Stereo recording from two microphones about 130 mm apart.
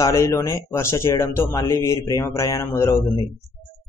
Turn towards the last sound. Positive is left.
turn(degrees=20)  # may be behind; listen again after turning